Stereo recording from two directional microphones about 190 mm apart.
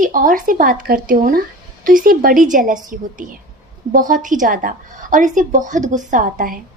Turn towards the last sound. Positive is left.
turn(degrees=-50)  # may be behind; listen again after turning